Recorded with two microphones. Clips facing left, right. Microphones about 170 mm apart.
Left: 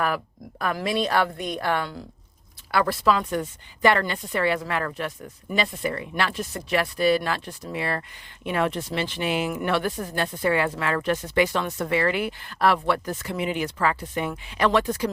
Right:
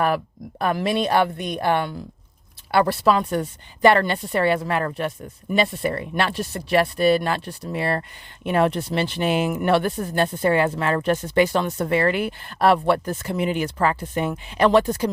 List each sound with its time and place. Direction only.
0.6 s a woman's voice: 25° right (ahead or behind)
9.6 s speech: 30° right (ahead or behind)
11.9 s speech: 45° right (ahead or behind)
12.5 s a woman's voice: 30° right (ahead or behind)